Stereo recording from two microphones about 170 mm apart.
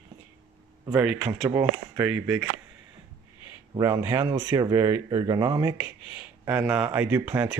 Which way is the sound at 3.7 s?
20° right (ahead or behind).